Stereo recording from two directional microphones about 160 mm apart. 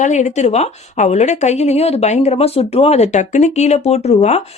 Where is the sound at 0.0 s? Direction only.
45° left (ahead or behind).